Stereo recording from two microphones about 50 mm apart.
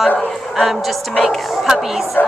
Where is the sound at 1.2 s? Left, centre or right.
Centre.